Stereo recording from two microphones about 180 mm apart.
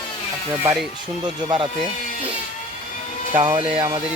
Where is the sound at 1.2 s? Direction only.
25° right (ahead or behind).